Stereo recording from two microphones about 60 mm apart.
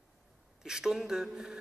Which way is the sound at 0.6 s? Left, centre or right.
Centre.